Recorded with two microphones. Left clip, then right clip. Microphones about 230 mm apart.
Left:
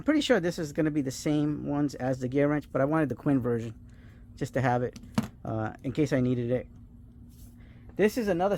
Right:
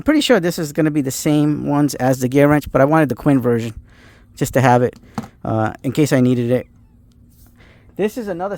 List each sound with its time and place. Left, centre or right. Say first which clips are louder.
0.0 s speech: right 11 dB; right
7.9 s speech: right 4 dB; right